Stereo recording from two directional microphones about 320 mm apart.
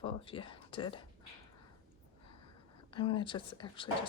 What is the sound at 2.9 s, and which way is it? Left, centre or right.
Speech, centre.